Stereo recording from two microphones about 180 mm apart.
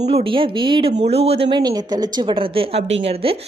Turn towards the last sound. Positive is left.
turn(degrees=-30)  # may be behind; listen again after turning